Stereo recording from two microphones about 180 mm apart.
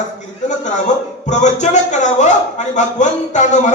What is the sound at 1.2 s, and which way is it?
A man's voice, 40° left (ahead or behind).